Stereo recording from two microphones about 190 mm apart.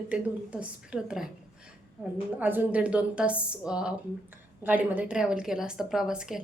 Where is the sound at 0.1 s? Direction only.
5° right (ahead or behind).